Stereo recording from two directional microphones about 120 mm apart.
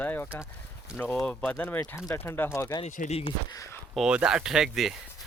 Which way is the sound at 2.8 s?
65° left (ahead or behind).